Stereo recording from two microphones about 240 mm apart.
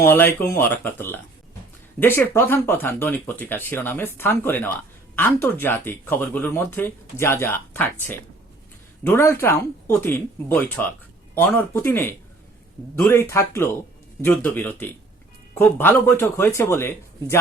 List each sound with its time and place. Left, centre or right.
0.0 s speech: centre